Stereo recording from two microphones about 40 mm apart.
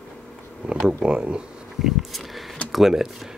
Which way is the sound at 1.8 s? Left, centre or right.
Centre.